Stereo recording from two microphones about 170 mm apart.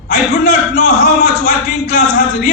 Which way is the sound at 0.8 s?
45° left (ahead or behind).